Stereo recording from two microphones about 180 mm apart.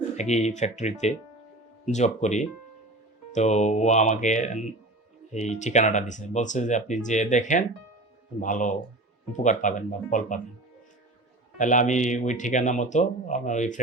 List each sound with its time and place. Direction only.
0.2 s speech: 40° left (ahead or behind)
11.5 s speech: 45° left (ahead or behind)